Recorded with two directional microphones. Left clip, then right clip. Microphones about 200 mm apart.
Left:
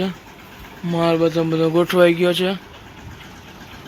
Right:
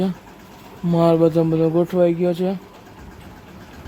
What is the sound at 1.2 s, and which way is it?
Speech, 25° right (ahead or behind).